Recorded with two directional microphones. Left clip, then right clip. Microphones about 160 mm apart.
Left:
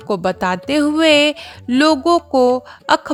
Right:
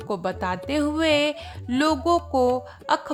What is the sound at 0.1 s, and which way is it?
A woman's voice, 40° left (ahead or behind).